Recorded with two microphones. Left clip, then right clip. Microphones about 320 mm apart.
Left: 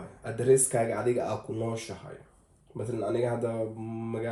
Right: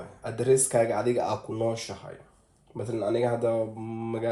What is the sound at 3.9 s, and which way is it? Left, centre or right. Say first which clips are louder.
Mantra: right 3 dB; right.